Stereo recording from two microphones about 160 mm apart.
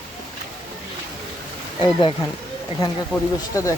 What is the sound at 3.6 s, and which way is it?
Speech, 20° left (ahead or behind).